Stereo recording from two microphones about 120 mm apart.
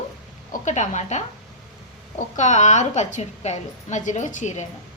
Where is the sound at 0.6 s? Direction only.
75° left (ahead or behind).